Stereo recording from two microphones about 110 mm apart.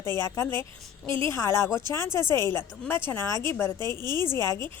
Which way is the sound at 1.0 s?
50° right (ahead or behind).